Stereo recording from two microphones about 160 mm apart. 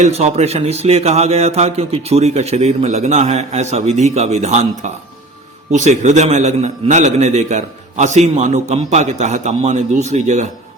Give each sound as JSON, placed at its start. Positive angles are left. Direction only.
{"t": 0.0, "sound": "a man's voice", "side_deg": -40}